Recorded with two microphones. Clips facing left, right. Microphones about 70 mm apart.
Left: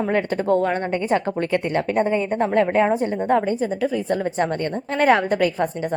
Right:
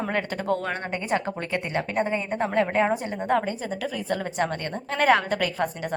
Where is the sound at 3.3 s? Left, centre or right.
Left.